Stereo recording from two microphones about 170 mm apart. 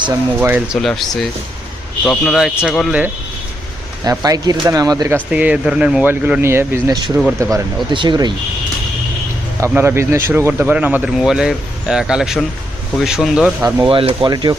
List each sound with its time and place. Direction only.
0.0 s speech: 15° right (ahead or behind)
0.8 s speech: centre (ahead or behind)
4.0 s speech: 20° right (ahead or behind)
5.1 s speech: 10° right (ahead or behind)
7.5 s speech: 25° right (ahead or behind)
9.7 s speech: 15° right (ahead or behind)
13.8 s speech: 30° right (ahead or behind)